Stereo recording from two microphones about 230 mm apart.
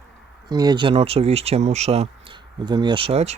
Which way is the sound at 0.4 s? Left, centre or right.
Centre.